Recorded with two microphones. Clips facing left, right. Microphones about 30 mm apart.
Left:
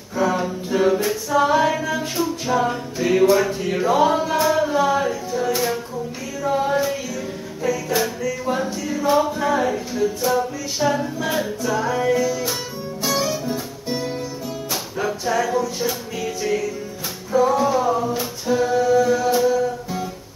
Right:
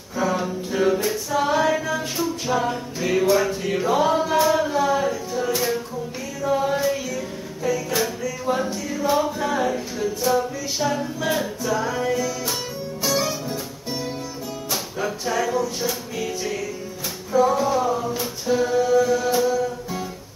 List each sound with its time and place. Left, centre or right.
0.1 s a capella: centre
6.8 s music: centre
12.1 s music: centre
13.0 s music: centre